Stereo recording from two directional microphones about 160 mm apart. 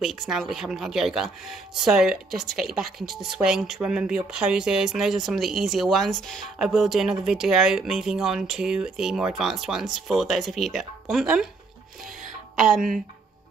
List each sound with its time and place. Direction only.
0.0 s speech: centre (ahead or behind)